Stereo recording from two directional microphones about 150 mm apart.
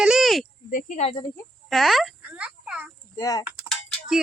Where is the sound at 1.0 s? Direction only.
45° left (ahead or behind).